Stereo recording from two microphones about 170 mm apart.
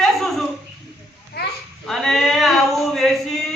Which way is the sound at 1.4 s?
70° left (ahead or behind).